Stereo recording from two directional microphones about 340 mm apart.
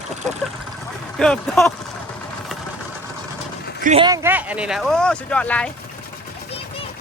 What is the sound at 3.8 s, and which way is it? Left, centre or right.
Speech, centre.